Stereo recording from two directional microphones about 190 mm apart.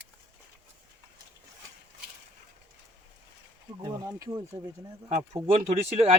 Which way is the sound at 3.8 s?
20° right (ahead or behind).